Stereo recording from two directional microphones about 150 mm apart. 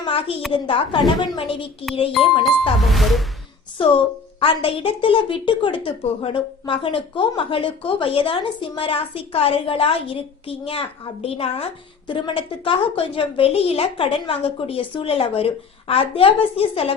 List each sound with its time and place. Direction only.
0.0 s a sound: 40° left (ahead or behind)
0.5 s a woman's voice: 35° left (ahead or behind)
2.8 s music: centre (ahead or behind)
3.8 s a woman's voice: 35° left (ahead or behind)